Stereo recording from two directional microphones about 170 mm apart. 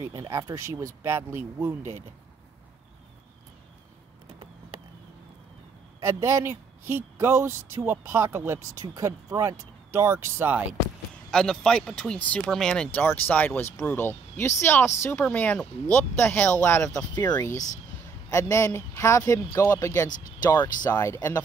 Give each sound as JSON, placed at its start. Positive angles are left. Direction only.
{"t": 0.0, "sound": "speech", "side_deg": -15}
{"t": 5.9, "sound": "speech", "side_deg": -15}
{"t": 11.2, "sound": "speech", "side_deg": 5}